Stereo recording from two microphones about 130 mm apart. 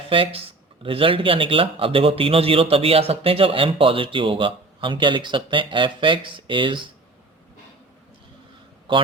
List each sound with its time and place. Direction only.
0.1 s a man's voice: 45° right (ahead or behind)
8.9 s a man's voice: 40° right (ahead or behind)